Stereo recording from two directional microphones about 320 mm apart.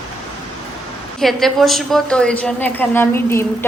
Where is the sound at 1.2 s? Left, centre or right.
Centre.